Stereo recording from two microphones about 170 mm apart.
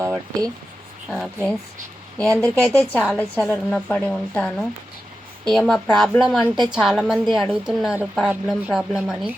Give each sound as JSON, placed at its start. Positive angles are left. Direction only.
{"t": 0.0, "sound": "speech", "side_deg": -15}
{"t": 1.0, "sound": "a woman's voice", "side_deg": 5}